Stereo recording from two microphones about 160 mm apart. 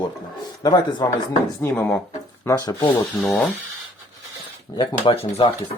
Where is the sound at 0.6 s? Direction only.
25° left (ahead or behind).